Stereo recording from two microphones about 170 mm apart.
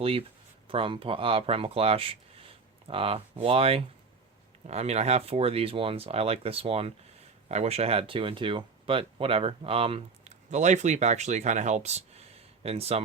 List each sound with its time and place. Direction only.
0.0 s speech: 35° right (ahead or behind)